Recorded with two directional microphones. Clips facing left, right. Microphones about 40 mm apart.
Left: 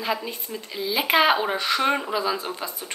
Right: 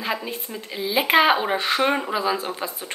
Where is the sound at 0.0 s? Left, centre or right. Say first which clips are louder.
Even; centre.